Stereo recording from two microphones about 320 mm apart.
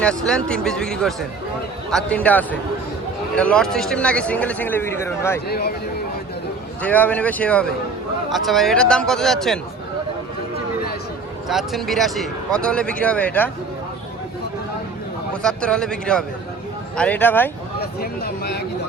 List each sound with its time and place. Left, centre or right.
0.0 s speech: centre
5.5 s speech: left
6.8 s speech: centre
11.4 s speech: centre
15.4 s speech: centre
17.7 s speech: left